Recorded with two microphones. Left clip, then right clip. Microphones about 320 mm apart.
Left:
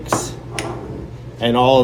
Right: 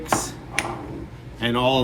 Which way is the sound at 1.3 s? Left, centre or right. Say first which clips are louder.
Left 7 dB; centre.